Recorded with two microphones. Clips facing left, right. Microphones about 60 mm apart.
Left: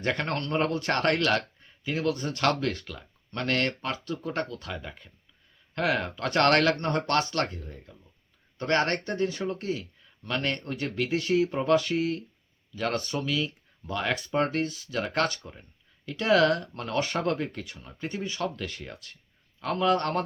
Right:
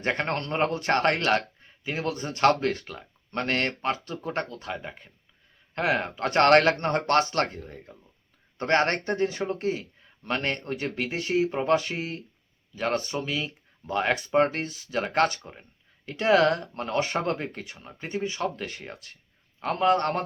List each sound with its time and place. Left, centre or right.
0.0 s speech: right
18.0 s speech: centre
18.5 s speech: right